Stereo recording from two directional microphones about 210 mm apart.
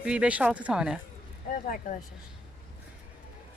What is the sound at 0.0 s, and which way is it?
Speech, 5° right (ahead or behind).